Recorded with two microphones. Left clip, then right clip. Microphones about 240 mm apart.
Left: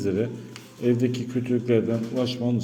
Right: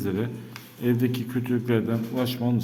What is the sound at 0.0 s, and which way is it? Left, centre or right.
A man's voice, centre.